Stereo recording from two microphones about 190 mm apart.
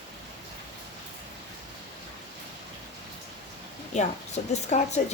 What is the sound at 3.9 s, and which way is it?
Speech, 35° left (ahead or behind).